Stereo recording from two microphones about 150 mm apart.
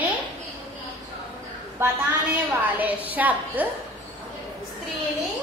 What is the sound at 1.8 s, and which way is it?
A woman's voice, 15° right (ahead or behind).